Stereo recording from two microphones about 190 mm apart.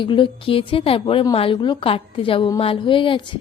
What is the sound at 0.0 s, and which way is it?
A woman's voice, 25° left (ahead or behind).